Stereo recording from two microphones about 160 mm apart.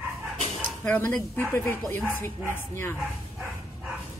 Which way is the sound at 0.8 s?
10° left (ahead or behind).